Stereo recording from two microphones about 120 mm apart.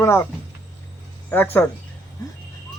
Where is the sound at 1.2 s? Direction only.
15° left (ahead or behind).